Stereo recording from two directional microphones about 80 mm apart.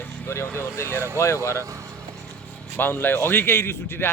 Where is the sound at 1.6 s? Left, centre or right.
Right.